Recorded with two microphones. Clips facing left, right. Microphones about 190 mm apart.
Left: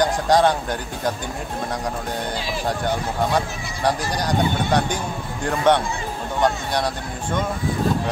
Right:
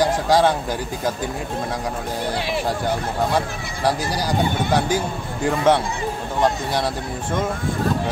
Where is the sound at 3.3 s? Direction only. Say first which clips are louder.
Right 1 dB; 5° right (ahead or behind).